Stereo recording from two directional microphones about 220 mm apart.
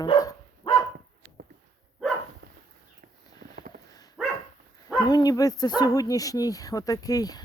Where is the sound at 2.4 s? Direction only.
50° right (ahead or behind).